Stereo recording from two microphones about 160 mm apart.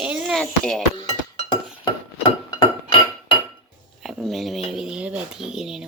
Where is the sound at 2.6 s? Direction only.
30° left (ahead or behind).